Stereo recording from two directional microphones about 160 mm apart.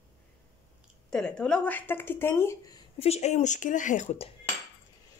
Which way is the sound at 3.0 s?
40° left (ahead or behind).